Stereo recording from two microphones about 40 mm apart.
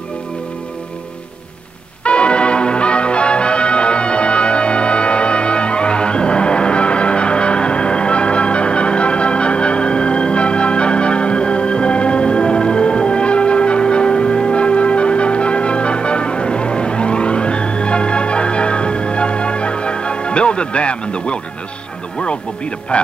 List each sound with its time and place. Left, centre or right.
2.0 s music: left